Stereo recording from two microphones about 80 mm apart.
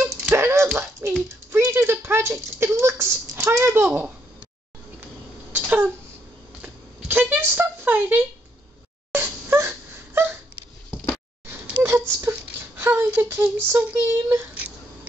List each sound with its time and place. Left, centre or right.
0.3 s music: right
1.0 s speech: right
5.5 s a sound: right
9.1 s wail: right
11.4 s a sound: right
12.2 s speech: right